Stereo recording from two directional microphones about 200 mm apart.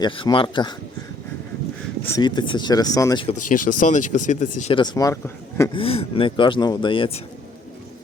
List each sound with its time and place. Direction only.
0.0 s speech: 25° left (ahead or behind)
2.1 s speech: 20° left (ahead or behind)
3.5 s speech: 40° left (ahead or behind)
4.8 s speech: 20° left (ahead or behind)
5.7 s speech: 30° left (ahead or behind)